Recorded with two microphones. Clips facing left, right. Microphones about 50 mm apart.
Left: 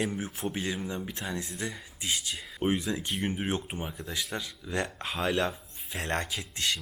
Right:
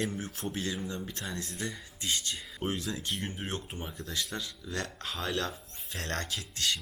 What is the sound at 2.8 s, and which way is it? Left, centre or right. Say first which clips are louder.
Speech: left 4 dB; centre.